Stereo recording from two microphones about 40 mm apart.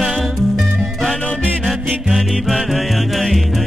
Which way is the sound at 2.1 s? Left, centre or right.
Centre.